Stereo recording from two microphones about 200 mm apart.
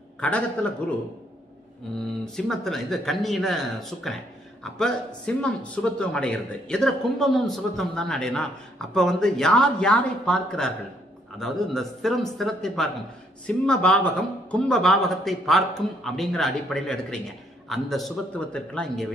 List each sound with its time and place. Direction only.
0.2 s a man's voice: 5° left (ahead or behind)
2.3 s a man's voice: centre (ahead or behind)